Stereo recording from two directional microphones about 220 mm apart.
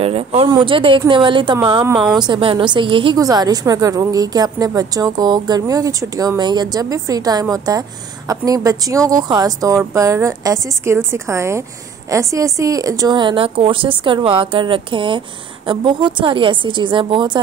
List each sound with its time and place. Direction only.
0.0 s a woman's voice: 25° right (ahead or behind)